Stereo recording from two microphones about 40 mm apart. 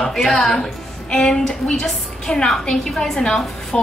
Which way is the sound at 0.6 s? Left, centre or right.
Left.